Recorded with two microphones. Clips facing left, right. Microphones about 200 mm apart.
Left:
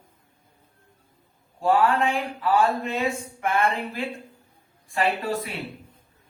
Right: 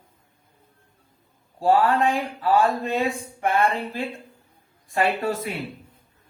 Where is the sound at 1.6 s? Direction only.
35° right (ahead or behind).